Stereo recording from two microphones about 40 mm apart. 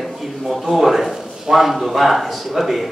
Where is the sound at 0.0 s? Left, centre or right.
Centre.